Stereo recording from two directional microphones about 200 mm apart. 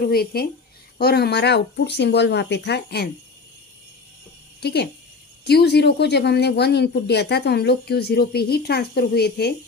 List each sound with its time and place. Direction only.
0.1 s speech: 50° left (ahead or behind)
4.6 s speech: 55° left (ahead or behind)